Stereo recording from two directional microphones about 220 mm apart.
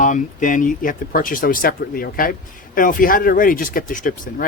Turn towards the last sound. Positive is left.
turn(degrees=40)  # may be behind; listen again after turning